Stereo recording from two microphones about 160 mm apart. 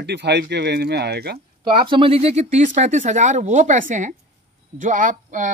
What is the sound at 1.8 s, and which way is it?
Speech, 30° right (ahead or behind).